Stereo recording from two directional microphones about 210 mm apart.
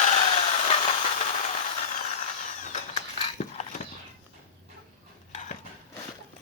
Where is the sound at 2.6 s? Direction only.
30° left (ahead or behind).